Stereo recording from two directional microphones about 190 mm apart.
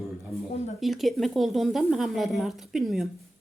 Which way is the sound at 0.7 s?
Centre (ahead or behind).